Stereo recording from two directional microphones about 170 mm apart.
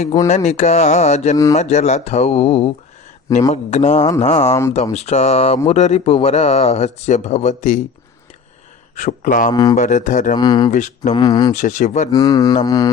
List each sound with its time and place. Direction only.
0.3 s a man's voice: 40° left (ahead or behind)
9.0 s a man's voice: 50° left (ahead or behind)
9.5 s speech: 25° left (ahead or behind)
9.7 s a man's voice: 45° left (ahead or behind)
10.3 s speech: 25° left (ahead or behind)
10.7 s a man's voice: 45° left (ahead or behind)
11.1 s speech: 25° left (ahead or behind)
11.5 s a man's voice: 45° left (ahead or behind)
12.1 s speech: 20° left (ahead or behind)